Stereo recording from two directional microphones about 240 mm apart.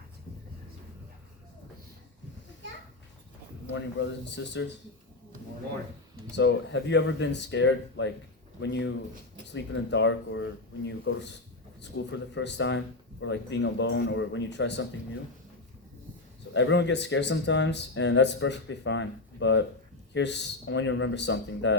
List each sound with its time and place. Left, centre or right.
3.7 s speech: left
6.3 s speech: left
16.6 s speech: left